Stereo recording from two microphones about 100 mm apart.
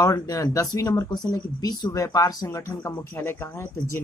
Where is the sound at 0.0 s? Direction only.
35° left (ahead or behind).